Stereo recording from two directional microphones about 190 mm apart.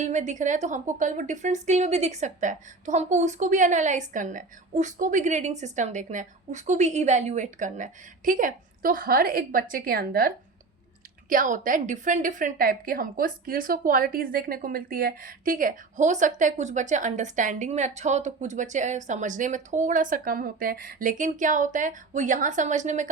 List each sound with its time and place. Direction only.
0.0 s a woman's voice: 40° right (ahead or behind)